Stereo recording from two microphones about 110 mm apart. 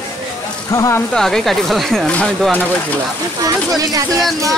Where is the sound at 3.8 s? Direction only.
35° right (ahead or behind).